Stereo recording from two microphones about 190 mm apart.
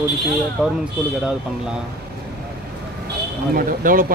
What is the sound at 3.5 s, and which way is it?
Speech, 50° right (ahead or behind).